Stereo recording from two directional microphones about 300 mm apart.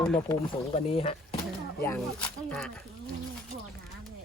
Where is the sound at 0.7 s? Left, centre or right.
Centre.